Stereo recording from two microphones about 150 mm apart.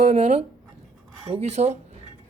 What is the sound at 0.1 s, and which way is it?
Speech, 45° right (ahead or behind).